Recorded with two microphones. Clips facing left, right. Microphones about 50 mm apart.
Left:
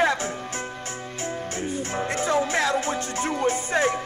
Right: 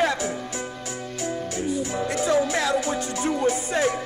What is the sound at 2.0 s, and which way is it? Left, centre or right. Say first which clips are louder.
Music: right 1 dB; left.